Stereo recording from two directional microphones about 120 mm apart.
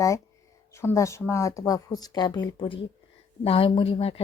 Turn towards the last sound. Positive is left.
turn(degrees=55)  # may be behind; listen again after turning